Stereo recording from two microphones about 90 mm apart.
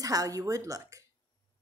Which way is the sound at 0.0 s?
40° right (ahead or behind).